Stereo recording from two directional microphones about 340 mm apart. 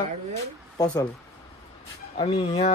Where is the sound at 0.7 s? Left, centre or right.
Centre.